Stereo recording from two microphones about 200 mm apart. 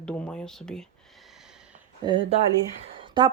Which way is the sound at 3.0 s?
20° right (ahead or behind).